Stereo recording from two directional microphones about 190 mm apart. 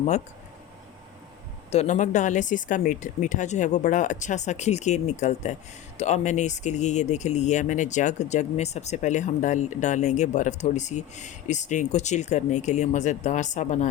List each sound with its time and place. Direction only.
1.7 s speech: 35° left (ahead or behind)